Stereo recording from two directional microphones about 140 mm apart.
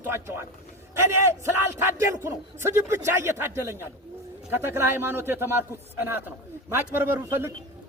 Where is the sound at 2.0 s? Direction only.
20° right (ahead or behind).